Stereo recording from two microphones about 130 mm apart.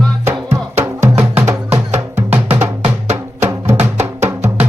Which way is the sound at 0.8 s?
20° right (ahead or behind).